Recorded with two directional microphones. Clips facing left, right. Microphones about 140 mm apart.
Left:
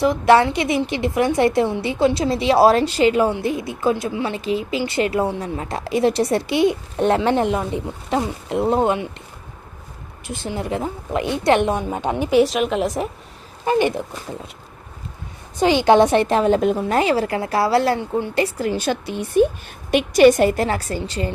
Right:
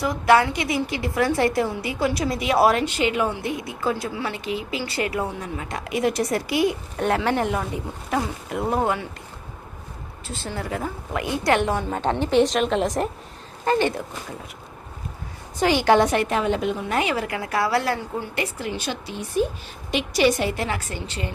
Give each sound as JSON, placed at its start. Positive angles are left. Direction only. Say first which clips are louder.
{"t": 0.0, "sound": "a woman's voice", "louder": "left 4 dB", "side_deg": 25}
{"t": 10.2, "sound": "a woman's voice", "louder": "left 5 dB", "side_deg": 15}
{"t": 13.7, "sound": "a woman's voice", "louder": "left 3 dB", "side_deg": 15}
{"t": 15.5, "sound": "a woman's voice", "louder": "left 4 dB", "side_deg": 20}
{"t": 16.2, "sound": "a woman's voice", "louder": "left 6 dB", "side_deg": 35}